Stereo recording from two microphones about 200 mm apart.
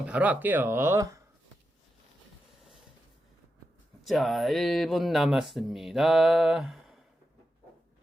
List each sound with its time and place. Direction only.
0.0 s speech: 5° right (ahead or behind)
4.0 s speech: centre (ahead or behind)